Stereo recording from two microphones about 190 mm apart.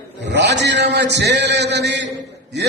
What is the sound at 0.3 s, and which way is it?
A man's voice, 65° right (ahead or behind).